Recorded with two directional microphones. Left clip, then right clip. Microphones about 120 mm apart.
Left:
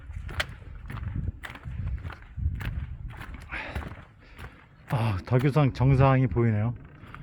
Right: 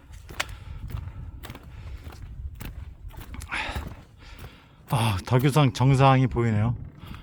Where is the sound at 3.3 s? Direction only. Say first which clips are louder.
Right 6 dB; 40° right (ahead or behind).